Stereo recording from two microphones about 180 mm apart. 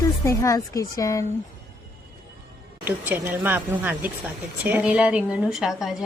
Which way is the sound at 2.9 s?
10° right (ahead or behind).